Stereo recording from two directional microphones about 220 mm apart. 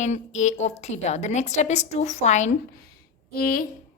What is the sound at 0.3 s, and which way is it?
A woman's voice, 30° left (ahead or behind).